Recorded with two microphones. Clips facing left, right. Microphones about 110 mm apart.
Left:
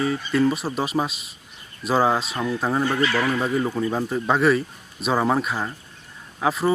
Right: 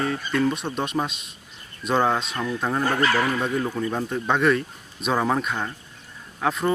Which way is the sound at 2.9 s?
45° right (ahead or behind).